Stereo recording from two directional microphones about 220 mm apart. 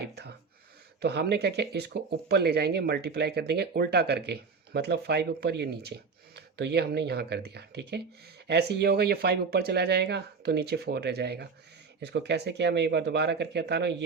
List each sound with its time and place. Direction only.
1.0 s speech: 50° right (ahead or behind)